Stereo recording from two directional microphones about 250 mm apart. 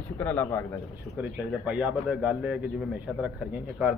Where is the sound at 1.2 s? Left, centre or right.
Centre.